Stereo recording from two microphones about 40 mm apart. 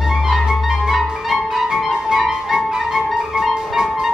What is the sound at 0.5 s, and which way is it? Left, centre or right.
Clarinet, centre.